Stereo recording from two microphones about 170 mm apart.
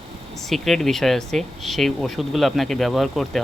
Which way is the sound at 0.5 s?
Centre (ahead or behind).